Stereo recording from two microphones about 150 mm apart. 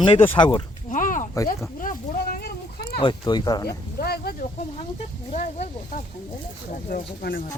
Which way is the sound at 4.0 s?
90° left.